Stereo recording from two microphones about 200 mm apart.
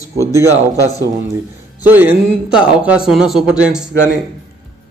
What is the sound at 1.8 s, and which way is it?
A man's voice, 10° right (ahead or behind).